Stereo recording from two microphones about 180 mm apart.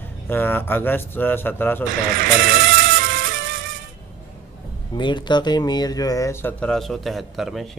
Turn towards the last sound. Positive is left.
turn(degrees=0)  # may be behind; listen again after turning